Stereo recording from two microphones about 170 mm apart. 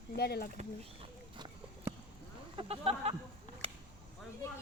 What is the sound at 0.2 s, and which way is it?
Speech, 70° left (ahead or behind).